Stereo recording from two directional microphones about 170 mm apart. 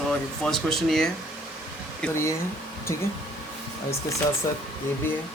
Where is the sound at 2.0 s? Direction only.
15° left (ahead or behind).